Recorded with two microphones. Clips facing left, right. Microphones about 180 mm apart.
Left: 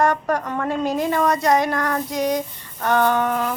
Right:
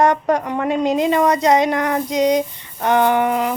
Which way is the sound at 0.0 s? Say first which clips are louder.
Right 4 dB; 20° right (ahead or behind).